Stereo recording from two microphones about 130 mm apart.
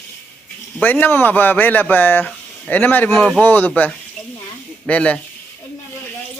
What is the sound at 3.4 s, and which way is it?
Speech, 15° left (ahead or behind).